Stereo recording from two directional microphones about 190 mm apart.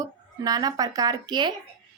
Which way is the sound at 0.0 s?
20° right (ahead or behind).